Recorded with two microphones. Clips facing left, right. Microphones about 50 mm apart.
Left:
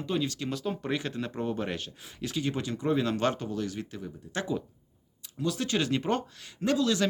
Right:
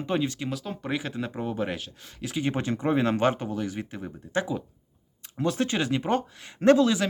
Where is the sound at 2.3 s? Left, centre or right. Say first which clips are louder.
Right 4 dB; right.